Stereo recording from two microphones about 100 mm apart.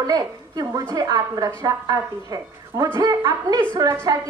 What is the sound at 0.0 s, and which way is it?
A woman's voice, 40° right (ahead or behind).